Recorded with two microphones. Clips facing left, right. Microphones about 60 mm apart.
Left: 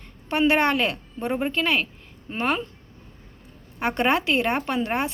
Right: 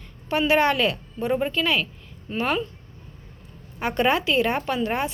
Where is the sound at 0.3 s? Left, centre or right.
Left.